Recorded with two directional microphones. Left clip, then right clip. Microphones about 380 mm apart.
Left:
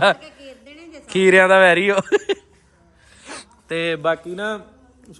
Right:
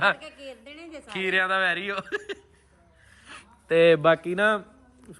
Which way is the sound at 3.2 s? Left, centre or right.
Centre.